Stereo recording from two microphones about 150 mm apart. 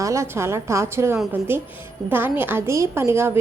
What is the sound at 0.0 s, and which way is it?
A woman's voice, 20° right (ahead or behind).